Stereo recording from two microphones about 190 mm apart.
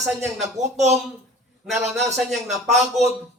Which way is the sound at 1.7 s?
Centre (ahead or behind).